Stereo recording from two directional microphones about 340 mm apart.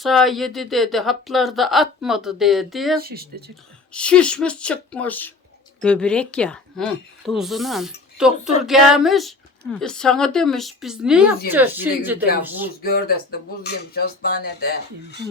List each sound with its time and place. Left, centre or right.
0.0 s speech: centre
3.0 s speech: right
3.9 s speech: centre
12.8 s speech: left